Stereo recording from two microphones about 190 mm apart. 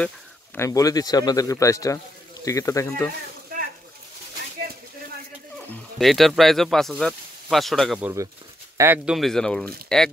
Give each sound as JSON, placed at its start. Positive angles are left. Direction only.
{"t": 0.6, "sound": "speech", "side_deg": 20}
{"t": 5.7, "sound": "speech", "side_deg": 0}
{"t": 8.0, "sound": "speech", "side_deg": -15}